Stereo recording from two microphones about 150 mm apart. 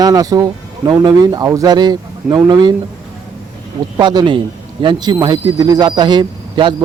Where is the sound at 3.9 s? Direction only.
30° right (ahead or behind).